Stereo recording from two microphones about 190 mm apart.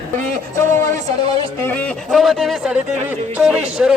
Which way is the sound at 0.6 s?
15° left (ahead or behind).